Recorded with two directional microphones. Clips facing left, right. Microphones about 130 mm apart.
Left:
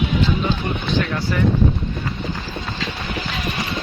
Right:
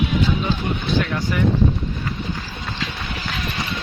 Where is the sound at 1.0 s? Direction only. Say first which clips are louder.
Left 1 dB; 10° right (ahead or behind).